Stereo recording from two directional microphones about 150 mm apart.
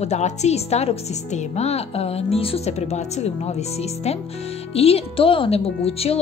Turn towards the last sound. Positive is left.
turn(degrees=40)  # may be behind; listen again after turning